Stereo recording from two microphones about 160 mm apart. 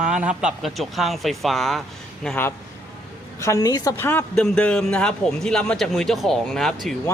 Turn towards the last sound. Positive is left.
turn(degrees=0)  # may be behind; listen again after turning